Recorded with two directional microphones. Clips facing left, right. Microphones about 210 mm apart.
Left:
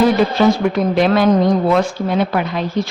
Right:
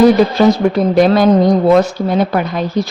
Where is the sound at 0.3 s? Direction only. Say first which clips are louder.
Right 3 dB; 35° right (ahead or behind).